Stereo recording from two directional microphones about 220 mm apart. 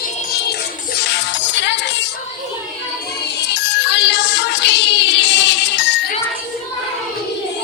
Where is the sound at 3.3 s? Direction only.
50° left (ahead or behind).